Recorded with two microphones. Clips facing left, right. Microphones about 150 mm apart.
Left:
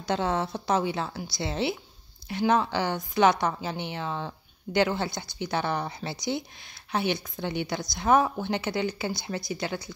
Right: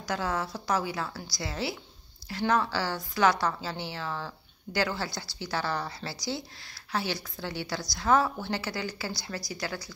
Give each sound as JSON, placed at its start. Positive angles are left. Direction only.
{"t": 0.0, "sound": "a woman's voice", "side_deg": 25}